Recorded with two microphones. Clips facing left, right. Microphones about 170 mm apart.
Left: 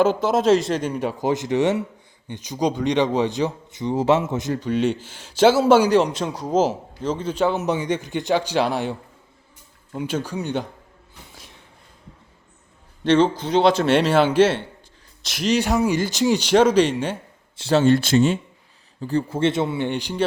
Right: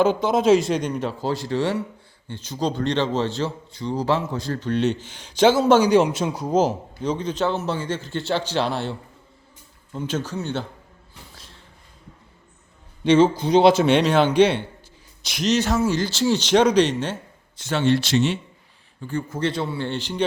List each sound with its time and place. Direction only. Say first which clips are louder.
0.0 s a man's voice: even; 5° left (ahead or behind)
6.0 s a man's voice: right 1 dB; 5° right (ahead or behind); by 10.7 s 15° left (ahead or behind)
13.1 s a man's voice: right 1 dB; 5° right (ahead or behind)
13.8 s a man's voice: even; 5° left (ahead or behind)
17.6 s speech: left 4 dB; 35° left (ahead or behind)
18.9 s speech: left 5 dB; 35° left (ahead or behind); by 20.2 s 10° left (ahead or behind)